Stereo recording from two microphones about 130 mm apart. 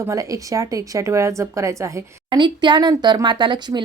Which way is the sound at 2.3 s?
35° right (ahead or behind).